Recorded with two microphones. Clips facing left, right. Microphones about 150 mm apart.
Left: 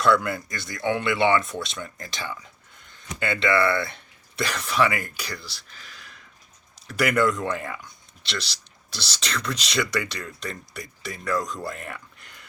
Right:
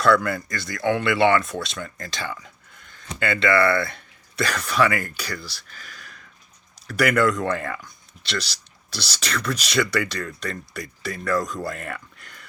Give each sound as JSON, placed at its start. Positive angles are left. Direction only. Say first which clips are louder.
{"t": 0.0, "sound": "speech", "louder": "right 2 dB", "side_deg": 20}